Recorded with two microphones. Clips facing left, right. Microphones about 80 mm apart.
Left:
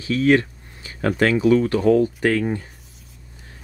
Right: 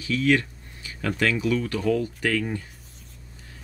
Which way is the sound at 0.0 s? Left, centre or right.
Left.